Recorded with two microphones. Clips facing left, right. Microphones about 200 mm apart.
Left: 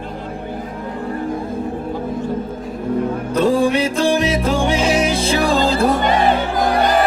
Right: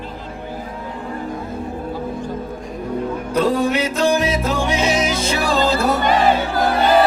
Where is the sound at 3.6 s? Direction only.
30° left (ahead or behind).